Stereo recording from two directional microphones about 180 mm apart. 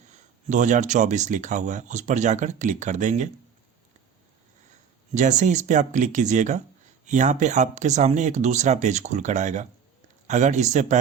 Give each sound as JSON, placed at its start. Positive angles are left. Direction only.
{"t": 0.1, "sound": "speech", "side_deg": -40}
{"t": 5.1, "sound": "speech", "side_deg": -40}